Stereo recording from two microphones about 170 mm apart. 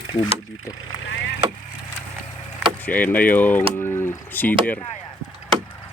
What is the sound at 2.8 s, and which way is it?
Speech, 10° left (ahead or behind).